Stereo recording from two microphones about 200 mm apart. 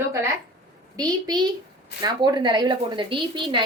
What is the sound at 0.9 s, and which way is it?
A woman's voice, 20° right (ahead or behind).